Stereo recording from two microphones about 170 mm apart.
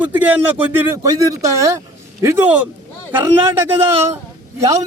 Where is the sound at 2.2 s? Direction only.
10° right (ahead or behind).